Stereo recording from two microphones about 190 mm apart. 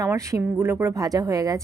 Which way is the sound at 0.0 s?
15° right (ahead or behind).